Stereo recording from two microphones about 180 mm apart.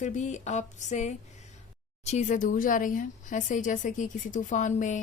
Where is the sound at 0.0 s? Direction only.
40° left (ahead or behind).